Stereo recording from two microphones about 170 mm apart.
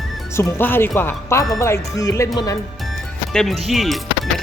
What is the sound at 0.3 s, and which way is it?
Speech, 15° left (ahead or behind).